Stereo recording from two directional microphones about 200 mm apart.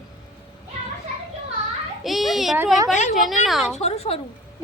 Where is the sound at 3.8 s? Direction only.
30° left (ahead or behind).